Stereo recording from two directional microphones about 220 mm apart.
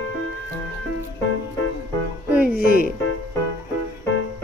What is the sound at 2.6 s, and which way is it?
Music, 40° left (ahead or behind).